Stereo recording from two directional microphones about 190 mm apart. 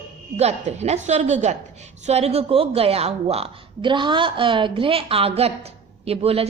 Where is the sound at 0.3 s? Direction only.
35° right (ahead or behind).